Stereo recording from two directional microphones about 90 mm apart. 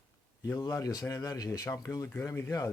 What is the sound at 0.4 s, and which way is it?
Speech, 35° left (ahead or behind).